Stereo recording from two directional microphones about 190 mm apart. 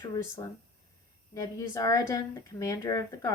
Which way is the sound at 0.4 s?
20° left (ahead or behind).